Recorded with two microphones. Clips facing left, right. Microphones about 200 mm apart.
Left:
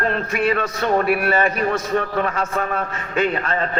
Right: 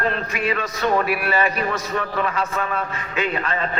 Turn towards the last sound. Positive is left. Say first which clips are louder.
# left 3 dB
turn(degrees=45)  # may be behind; listen again after turning